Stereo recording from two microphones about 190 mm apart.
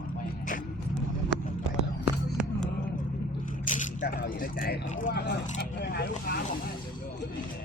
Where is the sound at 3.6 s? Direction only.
45° left (ahead or behind).